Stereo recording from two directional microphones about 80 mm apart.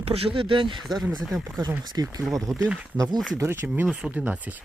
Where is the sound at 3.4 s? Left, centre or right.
Right.